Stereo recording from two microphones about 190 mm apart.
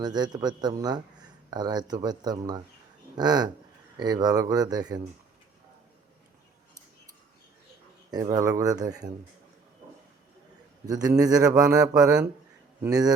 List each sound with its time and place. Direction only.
0.0 s speech: 20° right (ahead or behind)
8.1 s speech: 20° right (ahead or behind)
10.8 s speech: 20° right (ahead or behind)